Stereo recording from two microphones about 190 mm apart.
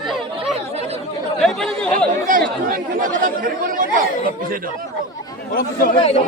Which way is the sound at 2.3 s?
45° right (ahead or behind).